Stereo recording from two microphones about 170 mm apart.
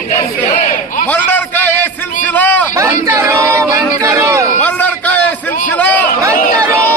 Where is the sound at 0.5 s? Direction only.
50° left (ahead or behind).